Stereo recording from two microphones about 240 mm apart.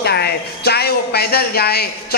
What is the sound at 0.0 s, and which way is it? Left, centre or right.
Speech, left.